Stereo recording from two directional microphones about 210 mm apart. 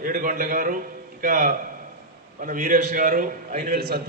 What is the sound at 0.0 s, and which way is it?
A man's voice, 40° right (ahead or behind).